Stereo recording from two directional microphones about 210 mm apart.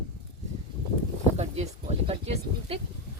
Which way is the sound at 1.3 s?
30° right (ahead or behind).